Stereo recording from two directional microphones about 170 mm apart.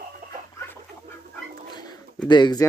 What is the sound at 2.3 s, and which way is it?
Speech, 25° left (ahead or behind).